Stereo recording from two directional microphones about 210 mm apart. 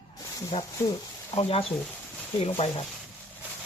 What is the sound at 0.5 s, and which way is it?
Speech, 30° left (ahead or behind).